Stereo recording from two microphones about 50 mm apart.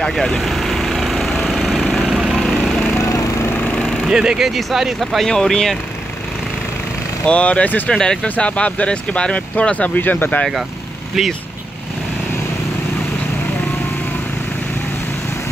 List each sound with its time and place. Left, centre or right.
0.0 s speech: centre
0.4 s vehicle: centre
1.4 s lawn mower: centre
2.0 s vehicle: centre
2.4 s vehicle: centre
3.0 s lawn mower: left
3.7 s a sound: left
4.1 s speech: centre
4.5 s speech: centre
5.2 s speech: centre
7.2 s speech: left
7.9 s speech: centre
9.9 s speech: left